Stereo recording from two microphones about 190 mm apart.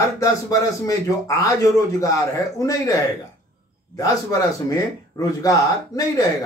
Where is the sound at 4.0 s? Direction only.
20° left (ahead or behind).